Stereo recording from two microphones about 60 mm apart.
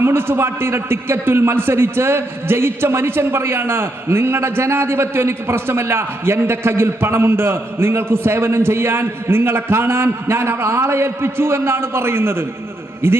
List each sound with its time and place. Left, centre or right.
0.0 s a man's voice: right